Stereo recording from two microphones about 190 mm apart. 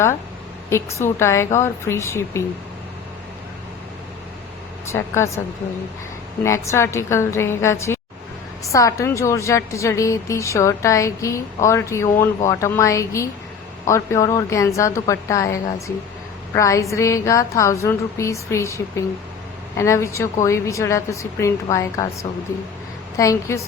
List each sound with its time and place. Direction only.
0.7 s a woman's voice: 15° left (ahead or behind)
4.9 s a woman's voice: 15° left (ahead or behind)
6.4 s a woman's voice: 15° left (ahead or behind)
16.6 s a woman's voice: 15° left (ahead or behind)